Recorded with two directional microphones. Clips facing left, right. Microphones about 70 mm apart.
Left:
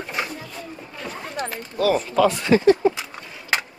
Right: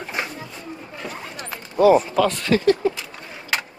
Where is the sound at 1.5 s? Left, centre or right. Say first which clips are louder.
Right 7 dB; right.